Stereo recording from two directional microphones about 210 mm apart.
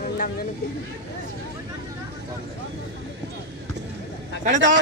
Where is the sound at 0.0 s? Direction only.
45° left (ahead or behind).